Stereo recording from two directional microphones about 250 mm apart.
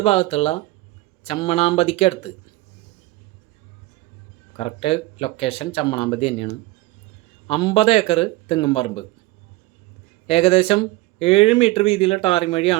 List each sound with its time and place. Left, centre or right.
0.0 s speech: left
4.5 s speech: left
10.2 s speech: left